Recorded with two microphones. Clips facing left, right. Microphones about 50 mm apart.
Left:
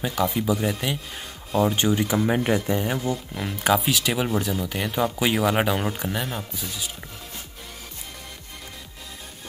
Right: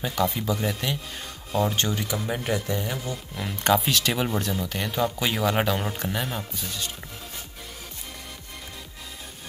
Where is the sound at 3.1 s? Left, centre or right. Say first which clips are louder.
Left 3 dB; centre.